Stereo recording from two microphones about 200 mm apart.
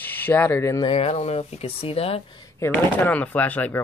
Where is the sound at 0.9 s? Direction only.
30° left (ahead or behind).